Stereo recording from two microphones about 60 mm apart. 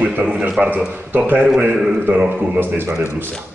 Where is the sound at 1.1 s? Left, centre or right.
Right.